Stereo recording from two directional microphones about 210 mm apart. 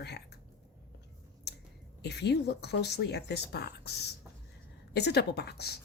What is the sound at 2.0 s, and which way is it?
Speech, 50° left (ahead or behind).